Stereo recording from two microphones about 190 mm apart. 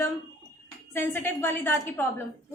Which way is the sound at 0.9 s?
10° left (ahead or behind).